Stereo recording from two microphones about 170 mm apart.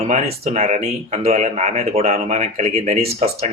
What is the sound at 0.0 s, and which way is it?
Speech, 35° right (ahead or behind).